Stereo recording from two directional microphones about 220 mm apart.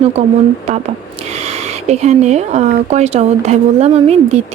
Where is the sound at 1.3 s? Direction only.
30° right (ahead or behind).